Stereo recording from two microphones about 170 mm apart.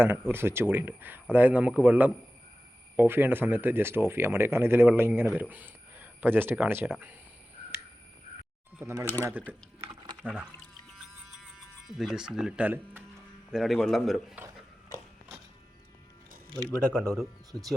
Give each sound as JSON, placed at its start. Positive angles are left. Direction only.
{"t": 0.0, "sound": "speech", "side_deg": -10}
{"t": 8.8, "sound": "speech", "side_deg": -15}
{"t": 10.2, "sound": "speech", "side_deg": -5}
{"t": 10.9, "sound": "music", "side_deg": 0}
{"t": 13.5, "sound": "a man's voice", "side_deg": 0}
{"t": 16.7, "sound": "a man's voice", "side_deg": 5}